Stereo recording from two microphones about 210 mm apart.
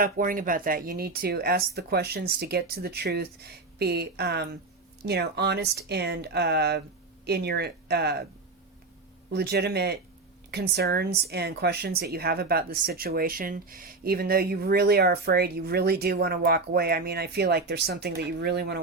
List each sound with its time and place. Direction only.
0.0 s a woman's voice: 40° right (ahead or behind)
9.3 s a woman's voice: 50° right (ahead or behind)